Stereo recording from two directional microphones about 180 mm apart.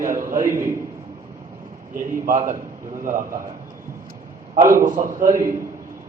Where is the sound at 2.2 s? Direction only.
45° right (ahead or behind).